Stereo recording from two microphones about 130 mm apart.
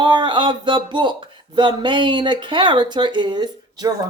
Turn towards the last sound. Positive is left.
turn(degrees=-35)  # may be behind; listen again after turning